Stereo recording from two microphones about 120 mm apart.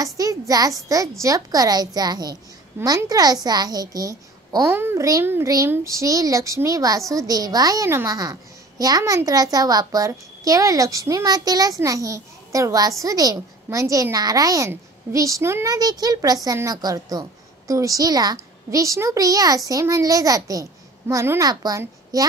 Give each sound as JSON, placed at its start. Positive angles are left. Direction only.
{"t": 0.0, "sound": "a child's voice", "side_deg": -30}